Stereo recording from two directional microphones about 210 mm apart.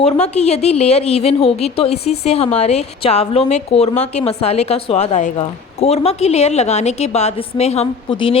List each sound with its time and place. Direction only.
0.0 s a woman's voice: 30° left (ahead or behind)